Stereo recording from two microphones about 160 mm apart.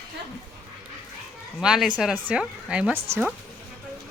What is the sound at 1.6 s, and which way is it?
Speech, 5° right (ahead or behind).